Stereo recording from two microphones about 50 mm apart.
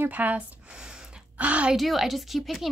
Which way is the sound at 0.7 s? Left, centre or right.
Centre.